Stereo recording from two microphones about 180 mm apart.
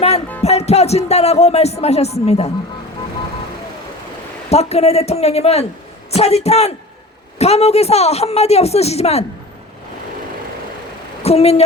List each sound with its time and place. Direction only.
0.4 s speech: 35° left (ahead or behind)
4.4 s speech: 35° left (ahead or behind)
11.2 s a woman's voice: 35° left (ahead or behind)